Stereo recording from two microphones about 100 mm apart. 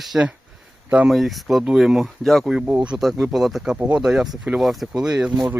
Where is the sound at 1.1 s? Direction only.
Centre (ahead or behind).